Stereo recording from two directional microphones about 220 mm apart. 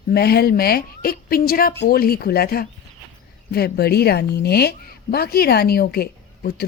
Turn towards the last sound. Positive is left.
turn(degrees=45)  # may be behind; listen again after turning